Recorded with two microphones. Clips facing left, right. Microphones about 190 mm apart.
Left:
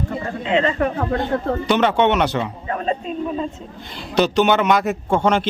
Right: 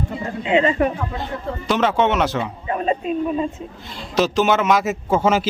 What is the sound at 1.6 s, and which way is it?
Speech, centre (ahead or behind).